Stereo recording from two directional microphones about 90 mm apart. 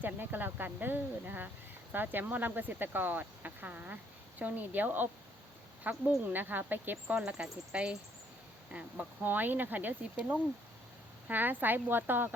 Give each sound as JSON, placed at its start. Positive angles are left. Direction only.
{"t": 0.0, "sound": "speech", "side_deg": -20}
{"t": 7.2, "sound": "speech", "side_deg": -10}
{"t": 11.3, "sound": "speech", "side_deg": -20}